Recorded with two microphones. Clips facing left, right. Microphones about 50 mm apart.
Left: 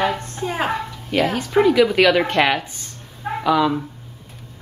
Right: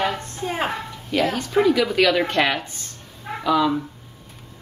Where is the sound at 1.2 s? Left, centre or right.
Centre.